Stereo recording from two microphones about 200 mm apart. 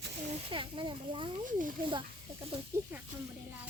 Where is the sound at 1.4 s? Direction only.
40° right (ahead or behind).